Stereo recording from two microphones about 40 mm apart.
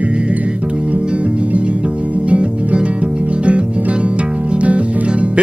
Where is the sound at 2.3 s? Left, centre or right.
Right.